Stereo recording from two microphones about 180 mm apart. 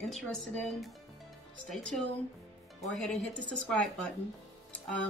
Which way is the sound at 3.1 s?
5° left (ahead or behind).